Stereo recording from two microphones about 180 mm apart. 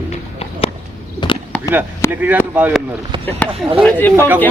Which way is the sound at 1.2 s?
25° left (ahead or behind).